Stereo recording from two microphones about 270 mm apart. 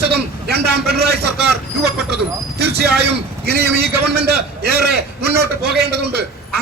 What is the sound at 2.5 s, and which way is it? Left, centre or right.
A man's voice, right.